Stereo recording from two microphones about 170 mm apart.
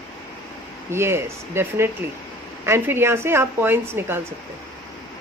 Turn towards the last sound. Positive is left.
turn(degrees=-15)  # may be behind; listen again after turning